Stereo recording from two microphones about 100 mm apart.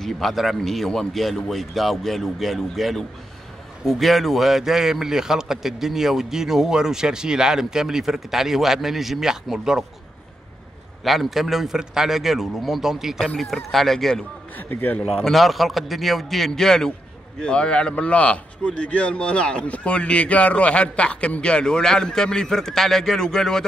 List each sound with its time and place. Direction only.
0.0 s a man's voice: centre (ahead or behind)
11.1 s a man's voice: centre (ahead or behind)
14.6 s speech: 20° left (ahead or behind)
15.2 s a man's voice: centre (ahead or behind)